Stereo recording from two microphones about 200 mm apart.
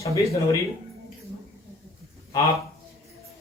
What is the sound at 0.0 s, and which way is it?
Speech, 15° left (ahead or behind).